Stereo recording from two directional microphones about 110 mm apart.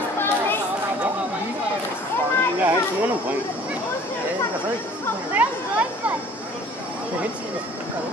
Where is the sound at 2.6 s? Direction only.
15° right (ahead or behind).